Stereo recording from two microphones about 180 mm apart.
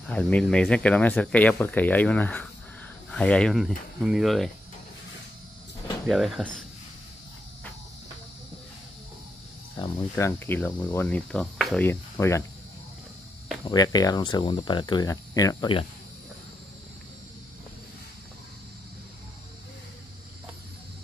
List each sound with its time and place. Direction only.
0.1 s speech: 5° left (ahead or behind)
6.0 s speech: centre (ahead or behind)
9.8 s speech: 15° left (ahead or behind)
11.8 s speech: 15° left (ahead or behind)
13.7 s speech: 20° left (ahead or behind)